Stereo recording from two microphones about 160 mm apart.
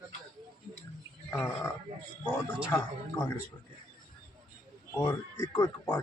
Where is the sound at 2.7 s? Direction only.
15° left (ahead or behind).